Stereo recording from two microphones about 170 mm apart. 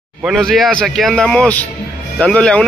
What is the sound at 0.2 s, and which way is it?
A man's voice, centre (ahead or behind).